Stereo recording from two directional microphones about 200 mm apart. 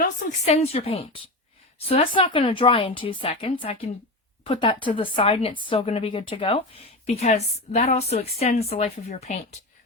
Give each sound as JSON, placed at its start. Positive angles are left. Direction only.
{"t": 0.0, "sound": "a woman's voice", "side_deg": 35}